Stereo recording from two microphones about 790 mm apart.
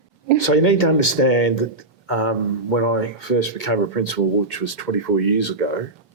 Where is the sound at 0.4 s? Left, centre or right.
Left.